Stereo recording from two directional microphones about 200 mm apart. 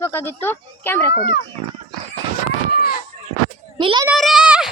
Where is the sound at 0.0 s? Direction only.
10° left (ahead or behind).